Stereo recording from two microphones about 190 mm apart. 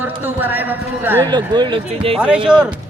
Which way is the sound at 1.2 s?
25° right (ahead or behind).